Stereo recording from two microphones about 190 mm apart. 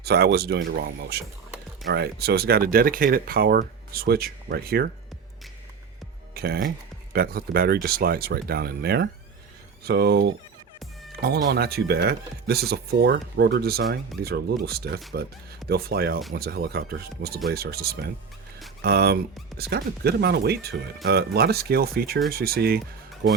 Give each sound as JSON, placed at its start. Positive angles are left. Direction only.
{"t": 0.0, "sound": "speech", "side_deg": -55}
{"t": 6.3, "sound": "speech", "side_deg": -55}